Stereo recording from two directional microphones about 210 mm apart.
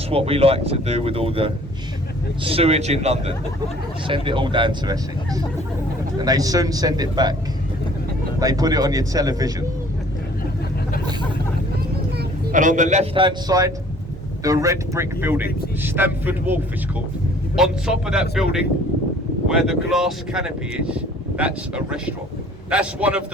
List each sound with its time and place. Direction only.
0.1 s speech: 30° right (ahead or behind)
8.4 s speech: 15° right (ahead or behind)
12.1 s speech: 40° right (ahead or behind); by 18.4 s 5° right (ahead or behind)
19.5 s speech: centre (ahead or behind)